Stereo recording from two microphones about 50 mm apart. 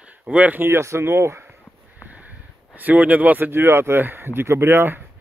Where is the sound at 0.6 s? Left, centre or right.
Right.